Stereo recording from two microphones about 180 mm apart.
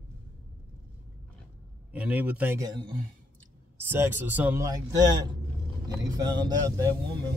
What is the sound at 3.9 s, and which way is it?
Speech, 10° right (ahead or behind).